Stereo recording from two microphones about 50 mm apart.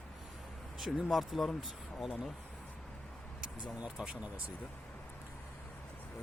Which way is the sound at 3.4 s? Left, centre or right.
Right.